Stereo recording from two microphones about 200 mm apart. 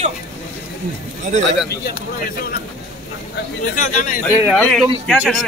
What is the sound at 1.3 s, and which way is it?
Speech, 40° right (ahead or behind).